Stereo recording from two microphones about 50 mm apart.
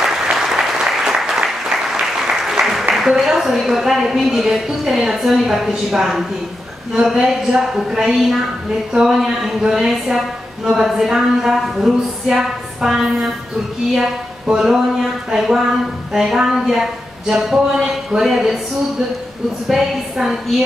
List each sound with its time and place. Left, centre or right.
0.0 s applause: centre
6.9 s speech: centre
19.7 s speech: centre